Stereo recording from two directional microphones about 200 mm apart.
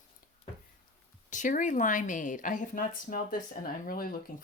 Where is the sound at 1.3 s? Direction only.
40° left (ahead or behind).